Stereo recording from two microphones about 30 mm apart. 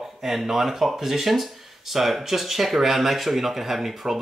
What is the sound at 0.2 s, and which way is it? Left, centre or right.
Speech, centre.